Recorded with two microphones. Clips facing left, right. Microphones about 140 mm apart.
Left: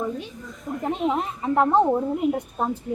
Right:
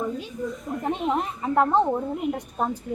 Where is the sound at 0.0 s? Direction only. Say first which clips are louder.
Right 1 dB; centre (ahead or behind).